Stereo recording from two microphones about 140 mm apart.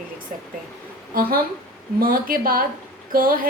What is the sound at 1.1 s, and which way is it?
A woman's voice, 90° right.